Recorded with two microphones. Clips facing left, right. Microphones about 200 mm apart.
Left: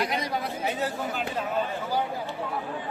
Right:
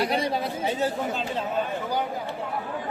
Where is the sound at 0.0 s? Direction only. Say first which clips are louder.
Right 4 dB; 30° right (ahead or behind).